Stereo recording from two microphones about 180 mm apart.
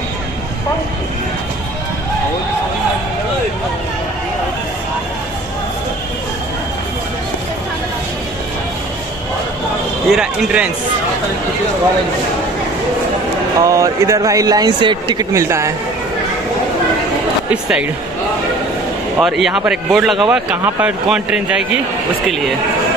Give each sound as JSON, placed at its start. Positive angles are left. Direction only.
{"t": 10.1, "sound": "speech", "side_deg": -5}
{"t": 13.6, "sound": "speech", "side_deg": -20}
{"t": 17.5, "sound": "speech", "side_deg": -5}
{"t": 19.1, "sound": "speech", "side_deg": 0}